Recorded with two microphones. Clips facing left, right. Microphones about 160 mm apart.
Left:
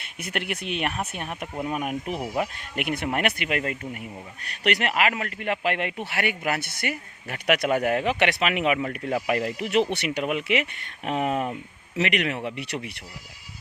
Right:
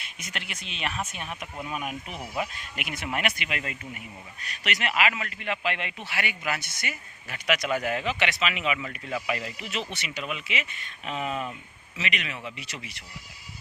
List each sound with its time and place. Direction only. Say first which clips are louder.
0.0 s speech: left 8 dB; 60° left (ahead or behind)
4.5 s speech: left 5 dB; 60° left (ahead or behind)